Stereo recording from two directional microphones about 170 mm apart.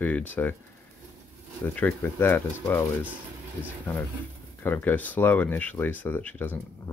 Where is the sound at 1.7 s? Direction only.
10° left (ahead or behind).